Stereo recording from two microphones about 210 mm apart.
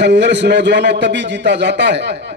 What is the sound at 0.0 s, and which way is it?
A man's voice, 55° right (ahead or behind).